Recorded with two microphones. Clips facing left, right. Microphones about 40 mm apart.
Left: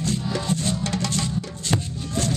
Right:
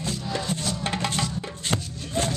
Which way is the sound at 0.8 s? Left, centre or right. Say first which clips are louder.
Left 1 dB; right.